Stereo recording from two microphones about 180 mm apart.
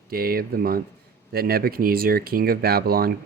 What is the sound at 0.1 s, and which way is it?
Speech, 55° right (ahead or behind).